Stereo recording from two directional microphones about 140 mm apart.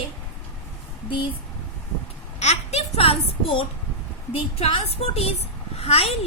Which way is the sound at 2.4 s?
50° left (ahead or behind).